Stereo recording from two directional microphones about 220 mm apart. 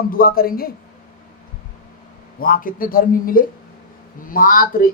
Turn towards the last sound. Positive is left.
turn(degrees=40)  # may be behind; listen again after turning